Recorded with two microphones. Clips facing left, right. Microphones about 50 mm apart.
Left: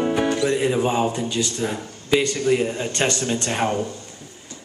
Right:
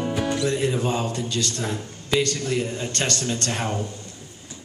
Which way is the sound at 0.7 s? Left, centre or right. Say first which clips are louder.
Left 4 dB; centre.